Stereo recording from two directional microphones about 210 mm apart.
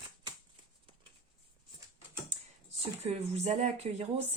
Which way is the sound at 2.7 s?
30° right (ahead or behind).